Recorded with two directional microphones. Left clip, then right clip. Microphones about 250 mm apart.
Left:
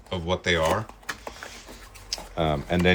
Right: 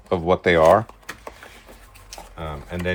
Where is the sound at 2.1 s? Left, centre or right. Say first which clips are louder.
Left 8 dB; left.